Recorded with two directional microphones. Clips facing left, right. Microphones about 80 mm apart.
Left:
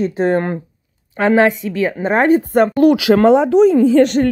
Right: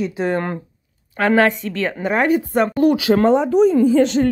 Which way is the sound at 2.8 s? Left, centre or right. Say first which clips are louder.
Left 3 dB; left.